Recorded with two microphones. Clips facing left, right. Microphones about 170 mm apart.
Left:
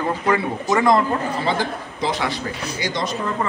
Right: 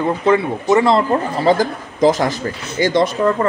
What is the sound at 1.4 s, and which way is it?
A man's voice, 40° right (ahead or behind).